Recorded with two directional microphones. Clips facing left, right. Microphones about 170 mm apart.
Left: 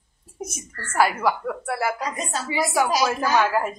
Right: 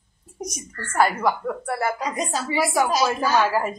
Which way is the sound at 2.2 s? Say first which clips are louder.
Right 2 dB; 5° left (ahead or behind).